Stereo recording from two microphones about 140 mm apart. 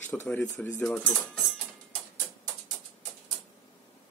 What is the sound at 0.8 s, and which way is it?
Speech, 5° left (ahead or behind).